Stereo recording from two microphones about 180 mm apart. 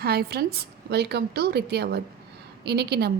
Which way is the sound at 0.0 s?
60° right (ahead or behind).